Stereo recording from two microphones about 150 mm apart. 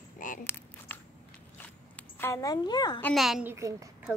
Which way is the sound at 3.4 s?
20° right (ahead or behind).